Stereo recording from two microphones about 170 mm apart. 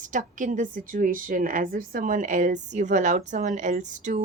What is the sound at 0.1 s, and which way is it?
A woman's voice, 50° right (ahead or behind).